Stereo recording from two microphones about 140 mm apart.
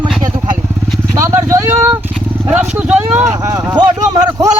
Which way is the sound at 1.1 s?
20° right (ahead or behind).